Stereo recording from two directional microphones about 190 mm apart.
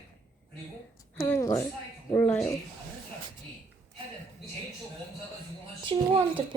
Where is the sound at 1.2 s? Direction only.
15° left (ahead or behind).